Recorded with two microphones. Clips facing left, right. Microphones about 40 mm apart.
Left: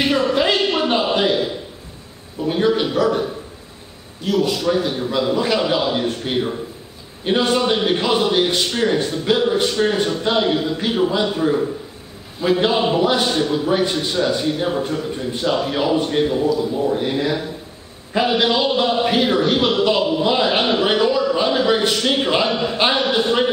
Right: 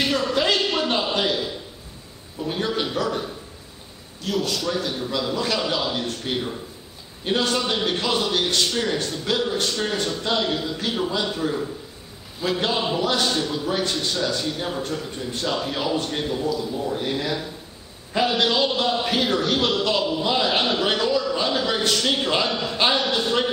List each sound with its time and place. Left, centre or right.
0.0 s a sound: centre
2.4 s a man's voice: centre
4.5 s a man's voice: centre